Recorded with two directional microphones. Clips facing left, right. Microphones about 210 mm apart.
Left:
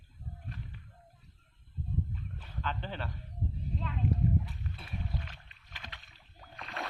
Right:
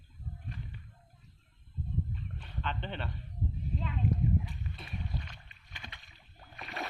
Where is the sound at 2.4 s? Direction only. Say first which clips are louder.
Even; 5° left (ahead or behind).